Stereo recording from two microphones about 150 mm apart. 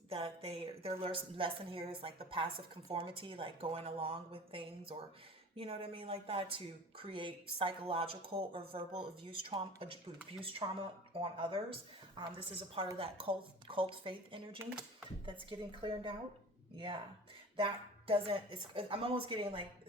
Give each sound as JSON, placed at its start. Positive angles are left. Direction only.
{"t": 0.1, "sound": "a woman's voice", "side_deg": -40}